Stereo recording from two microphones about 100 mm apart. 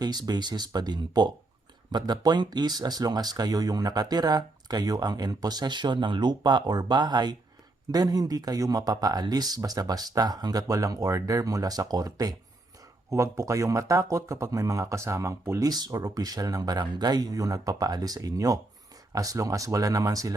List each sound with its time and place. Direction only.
0.0 s speech: 45° right (ahead or behind)